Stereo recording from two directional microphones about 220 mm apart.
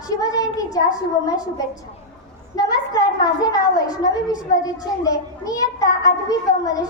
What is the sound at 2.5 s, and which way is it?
A woman's voice, 15° left (ahead or behind).